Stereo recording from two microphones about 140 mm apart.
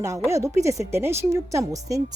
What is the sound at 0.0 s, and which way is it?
A woman's voice, 20° right (ahead or behind).